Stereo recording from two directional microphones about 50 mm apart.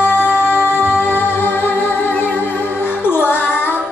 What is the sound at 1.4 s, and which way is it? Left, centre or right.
Music, left.